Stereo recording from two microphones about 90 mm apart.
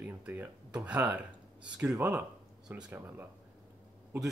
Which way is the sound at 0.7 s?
10° right (ahead or behind).